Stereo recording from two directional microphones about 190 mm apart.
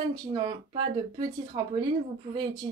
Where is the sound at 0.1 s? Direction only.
20° right (ahead or behind).